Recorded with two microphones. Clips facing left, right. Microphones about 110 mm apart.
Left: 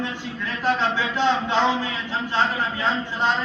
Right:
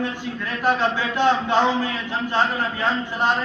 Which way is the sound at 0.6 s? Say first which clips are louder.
Right 2 dB; 50° right (ahead or behind).